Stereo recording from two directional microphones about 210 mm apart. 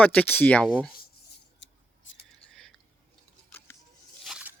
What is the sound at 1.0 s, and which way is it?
Whispering, 55° left (ahead or behind).